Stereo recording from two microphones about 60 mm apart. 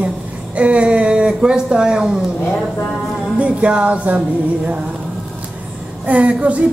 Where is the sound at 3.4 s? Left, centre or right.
Centre.